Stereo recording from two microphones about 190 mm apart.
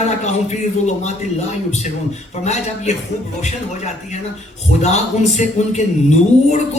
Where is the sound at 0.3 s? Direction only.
35° left (ahead or behind).